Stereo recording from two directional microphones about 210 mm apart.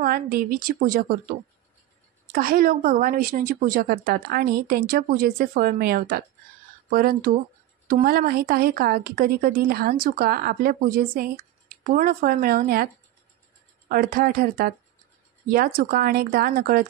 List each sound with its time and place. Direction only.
0.0 s a woman's voice: 45° right (ahead or behind)
2.3 s a woman's voice: 45° right (ahead or behind)